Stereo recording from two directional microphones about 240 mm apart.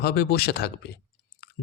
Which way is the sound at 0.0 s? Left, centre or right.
Left.